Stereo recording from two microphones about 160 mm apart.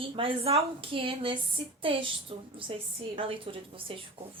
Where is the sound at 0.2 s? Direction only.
35° right (ahead or behind).